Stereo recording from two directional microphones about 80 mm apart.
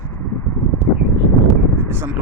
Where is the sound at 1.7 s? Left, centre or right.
Right.